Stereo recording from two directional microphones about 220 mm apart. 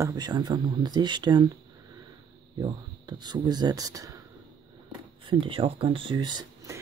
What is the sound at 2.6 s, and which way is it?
Speech, 20° right (ahead or behind).